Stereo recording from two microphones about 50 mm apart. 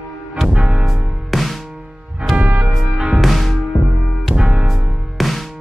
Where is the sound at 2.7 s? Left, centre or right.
Centre.